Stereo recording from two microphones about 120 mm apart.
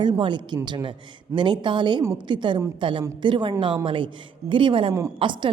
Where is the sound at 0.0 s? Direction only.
40° right (ahead or behind).